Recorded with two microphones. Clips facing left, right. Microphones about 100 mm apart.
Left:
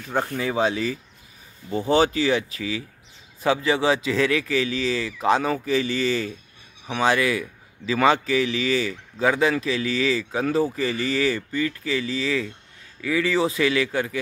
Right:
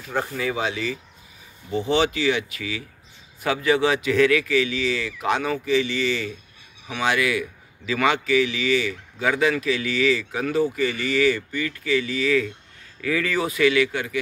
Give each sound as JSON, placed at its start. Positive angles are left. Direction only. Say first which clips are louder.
{"t": 0.4, "sound": "a man's voice", "louder": "left 3 dB", "side_deg": 30}